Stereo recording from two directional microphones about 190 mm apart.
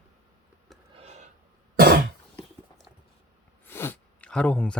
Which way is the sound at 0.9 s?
35° right (ahead or behind).